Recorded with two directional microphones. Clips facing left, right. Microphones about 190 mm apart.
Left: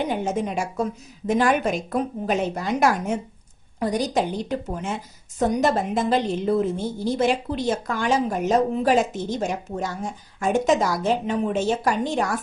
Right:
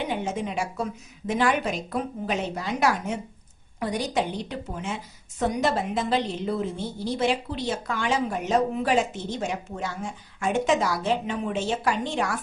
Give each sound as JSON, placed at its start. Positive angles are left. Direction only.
{"t": 0.1, "sound": "a woman's voice", "side_deg": 45}